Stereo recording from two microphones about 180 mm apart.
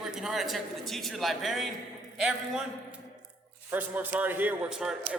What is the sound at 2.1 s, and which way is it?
A man's voice, 5° right (ahead or behind).